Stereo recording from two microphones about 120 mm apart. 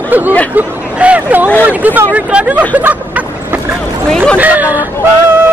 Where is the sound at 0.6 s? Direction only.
10° right (ahead or behind).